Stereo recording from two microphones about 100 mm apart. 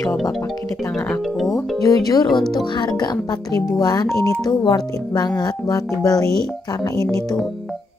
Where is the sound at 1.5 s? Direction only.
40° left (ahead or behind).